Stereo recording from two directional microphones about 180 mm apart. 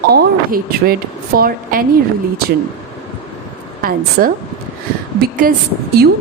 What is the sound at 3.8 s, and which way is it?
Speech, 55° right (ahead or behind).